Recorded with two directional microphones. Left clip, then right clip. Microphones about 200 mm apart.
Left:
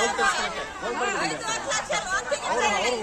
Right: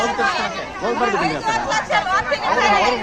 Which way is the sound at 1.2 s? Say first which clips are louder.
Right 8 dB; 15° left (ahead or behind).